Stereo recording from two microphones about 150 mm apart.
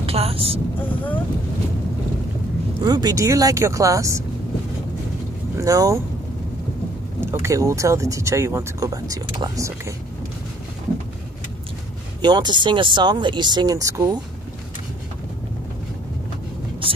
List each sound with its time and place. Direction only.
0.0 s speech: 40° right (ahead or behind)
0.7 s speech: 10° left (ahead or behind)
2.8 s speech: 25° right (ahead or behind)
5.6 s speech: 20° right (ahead or behind)
7.2 s speech: 15° right (ahead or behind)
12.2 s speech: 30° right (ahead or behind)